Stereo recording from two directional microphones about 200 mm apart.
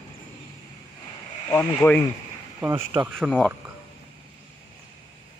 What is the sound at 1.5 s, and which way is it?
Speech, 10° left (ahead or behind).